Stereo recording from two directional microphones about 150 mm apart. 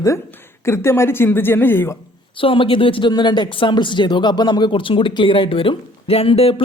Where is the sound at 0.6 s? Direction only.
15° left (ahead or behind).